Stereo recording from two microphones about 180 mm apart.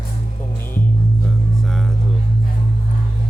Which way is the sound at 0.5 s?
10° left (ahead or behind).